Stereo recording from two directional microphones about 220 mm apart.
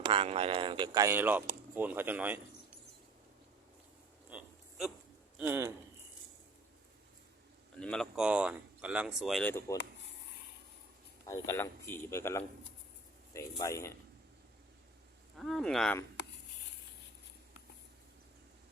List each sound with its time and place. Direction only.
0.0 s speech: 25° right (ahead or behind); by 2.4 s 5° right (ahead or behind)
4.3 s a sound: 5° right (ahead or behind)
5.4 s speech: 10° right (ahead or behind)
7.8 s speech: 5° left (ahead or behind)
11.3 s a man's voice: 10° left (ahead or behind)
13.6 s a man's voice: 15° left (ahead or behind)
15.4 s speech: centre (ahead or behind)